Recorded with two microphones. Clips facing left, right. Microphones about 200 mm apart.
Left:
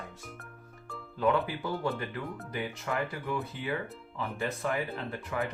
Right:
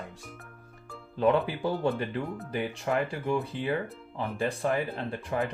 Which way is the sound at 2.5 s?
30° right (ahead or behind).